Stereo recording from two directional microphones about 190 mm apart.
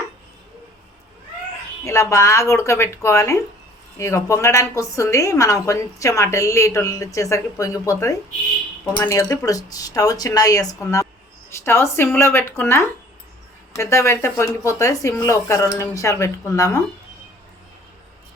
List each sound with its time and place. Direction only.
1.8 s a woman's voice: 15° left (ahead or behind)